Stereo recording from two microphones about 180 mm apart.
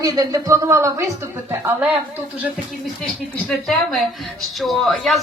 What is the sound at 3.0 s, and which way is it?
Speech, centre (ahead or behind).